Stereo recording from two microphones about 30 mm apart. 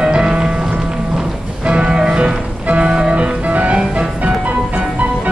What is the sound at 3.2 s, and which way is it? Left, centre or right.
Music, right.